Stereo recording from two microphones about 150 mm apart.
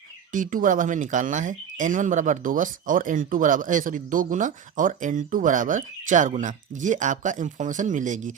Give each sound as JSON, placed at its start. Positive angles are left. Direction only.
{"t": 0.3, "sound": "speech", "side_deg": -60}